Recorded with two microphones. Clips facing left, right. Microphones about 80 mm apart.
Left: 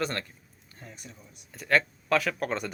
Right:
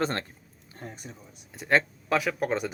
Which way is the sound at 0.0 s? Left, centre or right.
Right.